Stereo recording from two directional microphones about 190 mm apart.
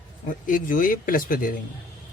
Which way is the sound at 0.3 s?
45° left (ahead or behind).